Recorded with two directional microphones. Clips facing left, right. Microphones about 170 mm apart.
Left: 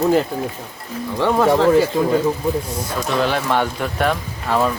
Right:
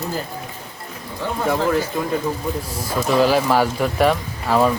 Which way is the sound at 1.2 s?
90° left.